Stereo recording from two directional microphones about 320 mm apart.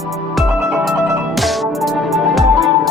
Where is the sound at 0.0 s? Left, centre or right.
Centre.